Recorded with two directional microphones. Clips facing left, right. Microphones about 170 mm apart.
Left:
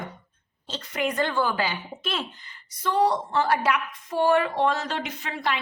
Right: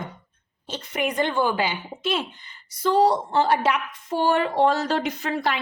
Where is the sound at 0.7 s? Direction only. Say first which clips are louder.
Right 1 dB; 20° right (ahead or behind).